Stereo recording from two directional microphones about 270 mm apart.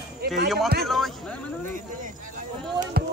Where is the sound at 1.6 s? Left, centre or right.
Right.